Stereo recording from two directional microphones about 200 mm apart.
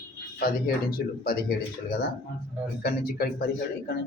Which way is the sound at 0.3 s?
50° left (ahead or behind).